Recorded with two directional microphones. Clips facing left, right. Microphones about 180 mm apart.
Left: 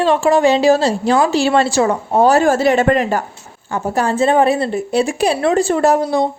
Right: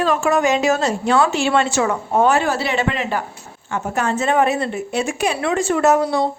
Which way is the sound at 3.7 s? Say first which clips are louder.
Left 4 dB; 35° left (ahead or behind).